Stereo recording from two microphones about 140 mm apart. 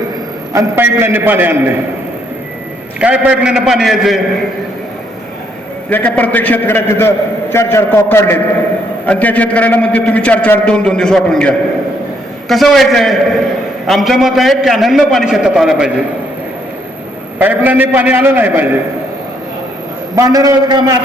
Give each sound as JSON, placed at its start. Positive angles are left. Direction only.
{"t": 0.5, "sound": "a man's voice", "side_deg": -20}
{"t": 3.0, "sound": "a man's voice", "side_deg": -5}
{"t": 5.9, "sound": "a man's voice", "side_deg": 10}
{"t": 17.4, "sound": "a man's voice", "side_deg": -10}
{"t": 20.1, "sound": "a man's voice", "side_deg": -25}